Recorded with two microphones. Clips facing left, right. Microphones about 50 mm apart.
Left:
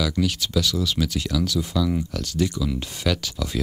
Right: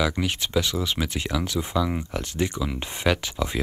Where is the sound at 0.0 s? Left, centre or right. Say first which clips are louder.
Left 1 dB; right.